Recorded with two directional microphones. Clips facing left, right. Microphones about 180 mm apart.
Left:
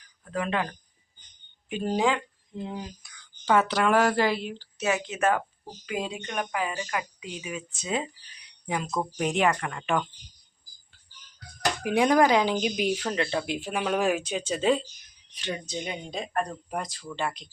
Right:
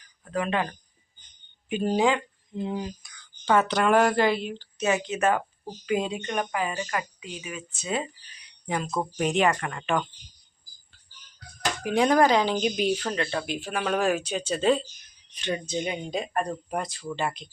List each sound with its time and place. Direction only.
0.3 s speech: centre (ahead or behind)
1.7 s speech: 5° right (ahead or behind)
3.4 s speech: 5° left (ahead or behind)
7.2 s speech: 15° left (ahead or behind)
8.6 s speech: 10° left (ahead or behind)
11.8 s speech: 15° left (ahead or behind)
13.3 s speech: 20° left (ahead or behind)
13.7 s speech: 10° left (ahead or behind)
15.4 s speech: centre (ahead or behind)